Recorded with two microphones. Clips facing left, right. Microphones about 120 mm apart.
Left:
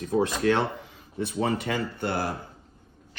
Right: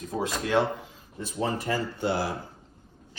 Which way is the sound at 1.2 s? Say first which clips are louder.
Left 2 dB; 60° left (ahead or behind).